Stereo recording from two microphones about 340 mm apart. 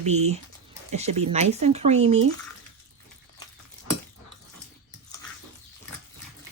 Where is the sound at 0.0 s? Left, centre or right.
Centre.